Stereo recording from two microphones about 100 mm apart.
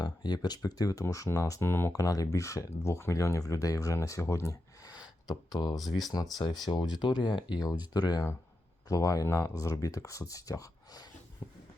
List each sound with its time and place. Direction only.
0.0 s speech: 45° left (ahead or behind); by 1.9 s 25° left (ahead or behind)
1.9 s speech: 35° left (ahead or behind)